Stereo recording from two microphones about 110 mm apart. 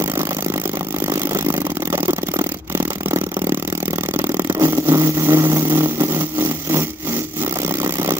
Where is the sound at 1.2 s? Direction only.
25° right (ahead or behind).